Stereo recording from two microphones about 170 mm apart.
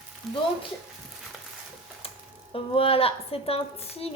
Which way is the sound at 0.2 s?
Centre (ahead or behind).